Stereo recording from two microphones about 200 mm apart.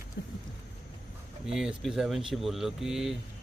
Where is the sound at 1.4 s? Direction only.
5° right (ahead or behind).